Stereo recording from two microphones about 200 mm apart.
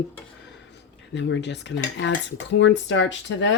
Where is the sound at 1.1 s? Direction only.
60° left (ahead or behind).